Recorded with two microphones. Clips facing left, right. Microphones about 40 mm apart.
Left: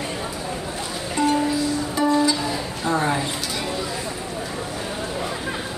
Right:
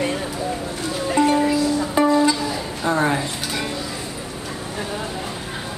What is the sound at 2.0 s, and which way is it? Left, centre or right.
Music, right.